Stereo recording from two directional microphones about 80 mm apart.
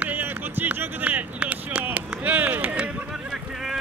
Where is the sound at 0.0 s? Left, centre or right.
Right.